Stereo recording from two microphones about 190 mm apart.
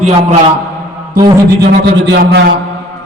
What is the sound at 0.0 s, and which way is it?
Speech, 35° right (ahead or behind).